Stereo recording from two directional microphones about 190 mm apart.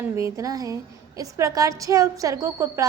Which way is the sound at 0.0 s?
15° right (ahead or behind).